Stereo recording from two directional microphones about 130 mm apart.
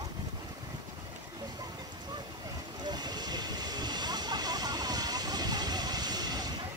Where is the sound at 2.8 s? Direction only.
30° right (ahead or behind).